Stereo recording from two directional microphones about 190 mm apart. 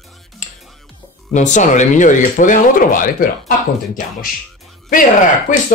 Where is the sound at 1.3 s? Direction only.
40° left (ahead or behind).